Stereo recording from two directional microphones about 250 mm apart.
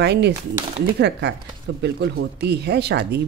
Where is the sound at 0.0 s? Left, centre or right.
Right.